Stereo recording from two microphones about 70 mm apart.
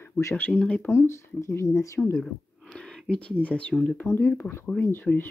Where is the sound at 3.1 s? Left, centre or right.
Centre.